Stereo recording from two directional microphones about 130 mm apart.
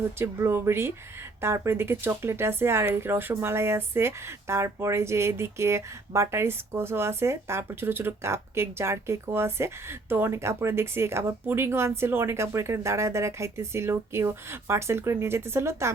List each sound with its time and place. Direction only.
0.2 s speech: 20° right (ahead or behind)